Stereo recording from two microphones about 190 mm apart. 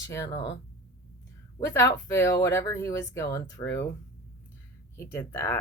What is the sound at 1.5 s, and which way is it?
Speech, 15° left (ahead or behind).